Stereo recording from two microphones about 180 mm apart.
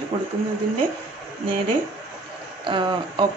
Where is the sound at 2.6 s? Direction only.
25° right (ahead or behind).